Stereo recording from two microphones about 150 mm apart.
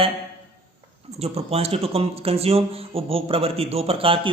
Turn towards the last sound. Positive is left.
turn(degrees=-40)  # may be behind; listen again after turning